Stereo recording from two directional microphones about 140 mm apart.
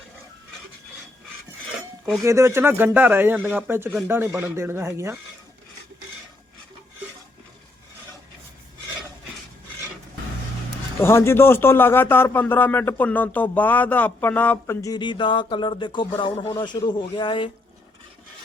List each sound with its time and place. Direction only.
2.2 s speech: 20° right (ahead or behind)
11.0 s speech: 20° left (ahead or behind); by 17.5 s 35° left (ahead or behind)